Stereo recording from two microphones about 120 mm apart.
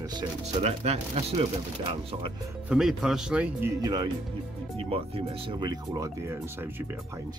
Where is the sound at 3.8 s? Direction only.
35° right (ahead or behind).